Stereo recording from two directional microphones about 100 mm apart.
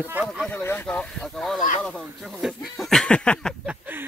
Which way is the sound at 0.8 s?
10° left (ahead or behind).